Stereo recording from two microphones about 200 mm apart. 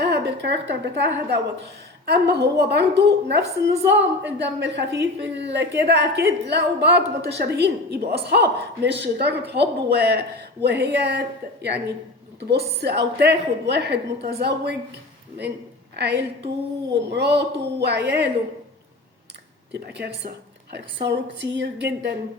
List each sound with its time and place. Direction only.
0.0 s a sound: 55° right (ahead or behind)
0.9 s a woman's voice: 55° right (ahead or behind)
19.7 s a woman's voice: 60° right (ahead or behind)